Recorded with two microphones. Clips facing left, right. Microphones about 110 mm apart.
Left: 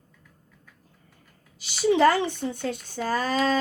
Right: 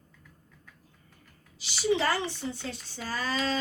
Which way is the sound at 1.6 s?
45° left (ahead or behind).